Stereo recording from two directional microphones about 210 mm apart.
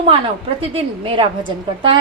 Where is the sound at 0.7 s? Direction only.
25° right (ahead or behind).